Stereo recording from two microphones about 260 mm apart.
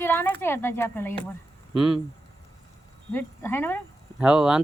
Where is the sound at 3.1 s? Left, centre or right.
Centre.